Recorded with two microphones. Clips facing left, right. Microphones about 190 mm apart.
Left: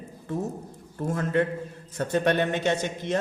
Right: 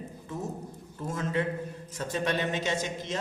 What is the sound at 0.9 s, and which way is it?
A man's voice, 55° left (ahead or behind).